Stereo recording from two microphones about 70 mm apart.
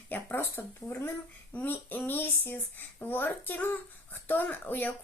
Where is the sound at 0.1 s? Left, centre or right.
Left.